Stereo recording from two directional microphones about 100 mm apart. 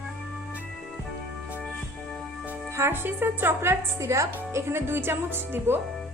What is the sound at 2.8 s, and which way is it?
A woman's voice, 25° right (ahead or behind).